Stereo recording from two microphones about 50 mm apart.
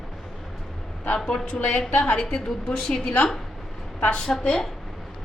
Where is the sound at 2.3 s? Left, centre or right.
Centre.